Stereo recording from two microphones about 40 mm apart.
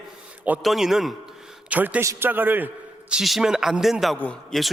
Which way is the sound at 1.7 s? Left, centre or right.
Right.